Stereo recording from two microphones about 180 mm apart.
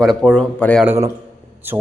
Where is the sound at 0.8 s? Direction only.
10° right (ahead or behind).